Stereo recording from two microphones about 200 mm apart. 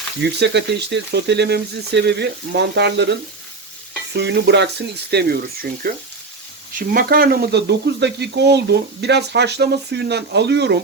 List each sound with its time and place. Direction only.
0.2 s speech: 60° right (ahead or behind)
4.2 s speech: 60° right (ahead or behind)